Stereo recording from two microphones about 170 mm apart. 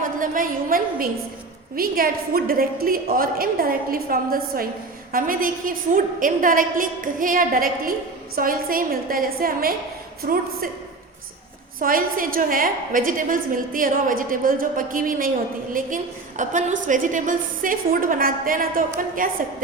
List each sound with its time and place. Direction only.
0.0 s a woman's voice: 55° right (ahead or behind)
11.8 s a woman's voice: 55° right (ahead or behind)
16.4 s a woman's voice: 45° right (ahead or behind)